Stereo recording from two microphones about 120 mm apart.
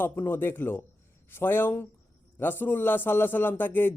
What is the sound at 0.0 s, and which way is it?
A man's voice, 20° left (ahead or behind).